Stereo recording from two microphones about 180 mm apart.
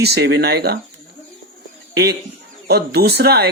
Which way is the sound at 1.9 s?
65° right (ahead or behind).